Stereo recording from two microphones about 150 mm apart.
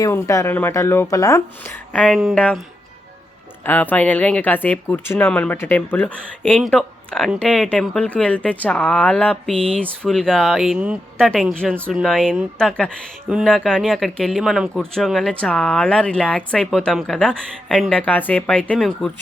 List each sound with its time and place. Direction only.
0.0 s speech: 20° left (ahead or behind)
1.9 s speech: 5° left (ahead or behind)
3.6 s speech: 10° left (ahead or behind)